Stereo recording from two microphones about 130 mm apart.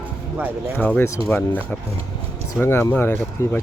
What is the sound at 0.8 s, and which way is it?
Speech, 15° left (ahead or behind).